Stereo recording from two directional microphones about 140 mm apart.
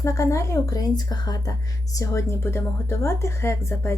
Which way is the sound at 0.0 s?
20° left (ahead or behind).